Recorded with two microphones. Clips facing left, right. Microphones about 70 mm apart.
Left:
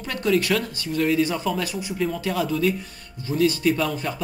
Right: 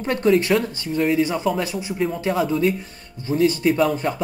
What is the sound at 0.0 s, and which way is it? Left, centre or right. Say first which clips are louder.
Speech: right 4 dB; right.